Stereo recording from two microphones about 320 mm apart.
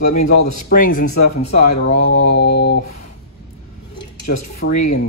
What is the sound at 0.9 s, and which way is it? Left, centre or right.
Speech, left.